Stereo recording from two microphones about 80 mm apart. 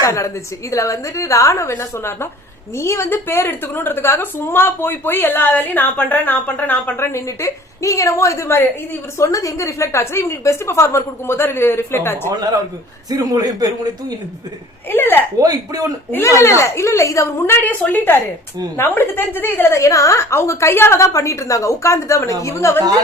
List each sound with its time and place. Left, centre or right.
0.0 s a woman's voice: left
12.3 s a man's voice: right
14.8 s a woman's voice: left
15.4 s a man's voice: right
16.1 s a woman's voice: left
17.6 s a woman's voice: centre
19.8 s a woman's voice: left